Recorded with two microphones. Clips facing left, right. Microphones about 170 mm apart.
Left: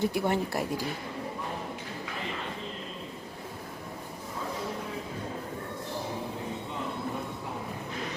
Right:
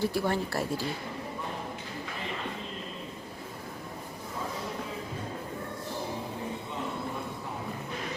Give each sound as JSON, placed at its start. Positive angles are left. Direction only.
{"t": 0.0, "sound": "speech", "side_deg": 20}